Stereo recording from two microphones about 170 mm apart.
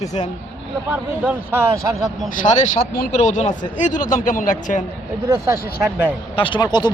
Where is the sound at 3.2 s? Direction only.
45° left (ahead or behind).